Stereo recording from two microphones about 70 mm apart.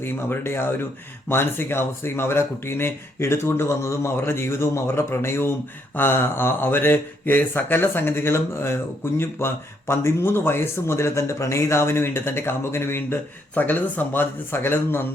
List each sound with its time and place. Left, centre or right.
0.0 s speech: left